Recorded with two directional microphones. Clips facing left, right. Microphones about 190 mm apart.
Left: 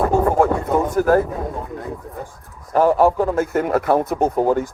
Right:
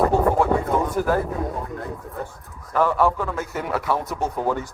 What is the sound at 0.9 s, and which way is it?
Speech, 45° left (ahead or behind).